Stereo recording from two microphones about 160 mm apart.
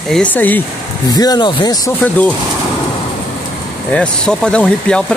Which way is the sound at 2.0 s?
10° left (ahead or behind).